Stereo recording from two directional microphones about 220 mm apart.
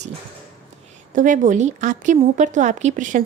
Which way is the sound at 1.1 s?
35° right (ahead or behind).